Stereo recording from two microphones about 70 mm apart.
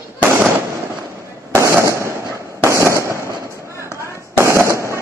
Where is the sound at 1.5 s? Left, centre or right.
Right.